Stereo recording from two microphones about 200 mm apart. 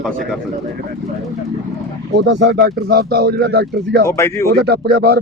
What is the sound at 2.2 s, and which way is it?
Speech, 60° right (ahead or behind).